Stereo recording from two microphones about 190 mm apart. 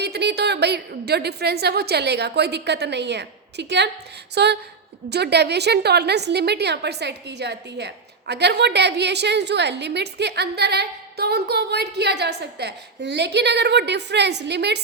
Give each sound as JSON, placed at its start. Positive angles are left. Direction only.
{"t": 0.0, "sound": "a woman's voice", "side_deg": -60}